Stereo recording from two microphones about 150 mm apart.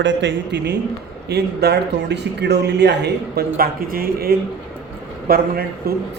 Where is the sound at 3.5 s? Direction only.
80° right.